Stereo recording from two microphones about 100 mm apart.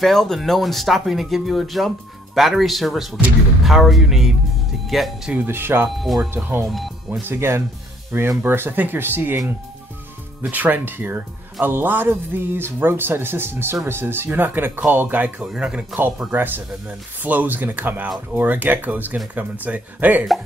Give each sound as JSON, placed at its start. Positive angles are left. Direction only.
{"t": 0.0, "sound": "speech", "side_deg": 5}
{"t": 5.3, "sound": "speech", "side_deg": -20}
{"t": 5.9, "sound": "speech", "side_deg": 0}
{"t": 7.1, "sound": "speech", "side_deg": -25}
{"t": 10.5, "sound": "speech", "side_deg": -20}